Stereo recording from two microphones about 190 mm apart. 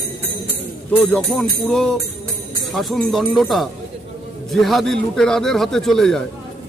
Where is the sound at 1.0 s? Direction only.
5° left (ahead or behind).